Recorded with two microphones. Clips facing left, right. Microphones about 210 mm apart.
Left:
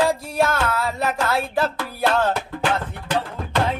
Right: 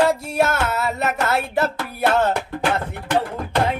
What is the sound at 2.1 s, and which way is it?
Music, 25° right (ahead or behind).